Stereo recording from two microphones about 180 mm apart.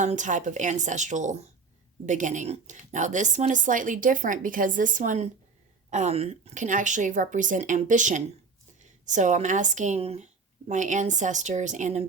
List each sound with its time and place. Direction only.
0.0 s speech: 45° right (ahead or behind)